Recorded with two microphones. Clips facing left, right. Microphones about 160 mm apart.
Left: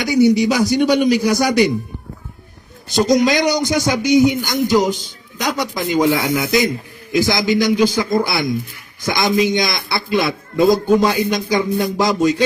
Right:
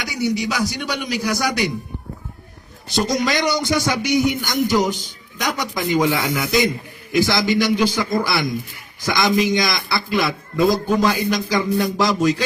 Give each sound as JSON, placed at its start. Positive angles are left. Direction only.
{"t": 0.0, "sound": "a sound", "side_deg": 20}
{"t": 0.4, "sound": "a man's voice", "side_deg": 25}
{"t": 3.1, "sound": "a man's voice", "side_deg": 20}